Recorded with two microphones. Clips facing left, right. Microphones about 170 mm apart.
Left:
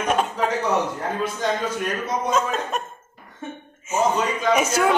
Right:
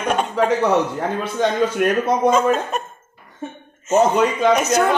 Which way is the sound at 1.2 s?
65° right (ahead or behind).